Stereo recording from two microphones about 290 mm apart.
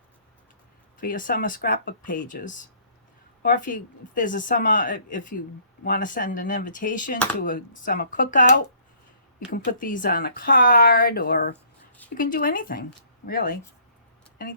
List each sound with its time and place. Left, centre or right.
0.9 s speech: left